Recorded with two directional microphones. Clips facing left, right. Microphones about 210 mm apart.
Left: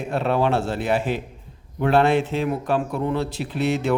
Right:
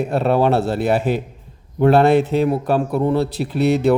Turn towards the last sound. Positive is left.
turn(degrees=-35)  # may be behind; listen again after turning